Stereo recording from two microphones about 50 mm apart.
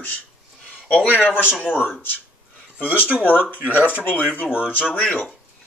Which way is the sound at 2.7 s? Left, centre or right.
Left.